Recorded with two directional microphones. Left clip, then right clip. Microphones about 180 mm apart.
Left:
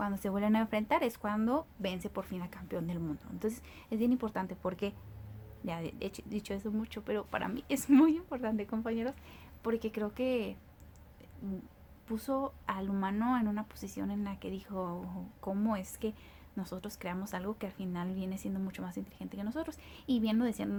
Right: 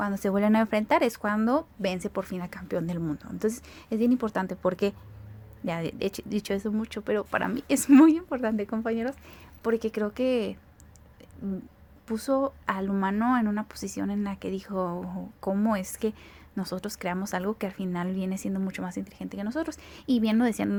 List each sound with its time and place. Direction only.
0.0 s speech: 35° right (ahead or behind)
12.0 s speech: 35° right (ahead or behind)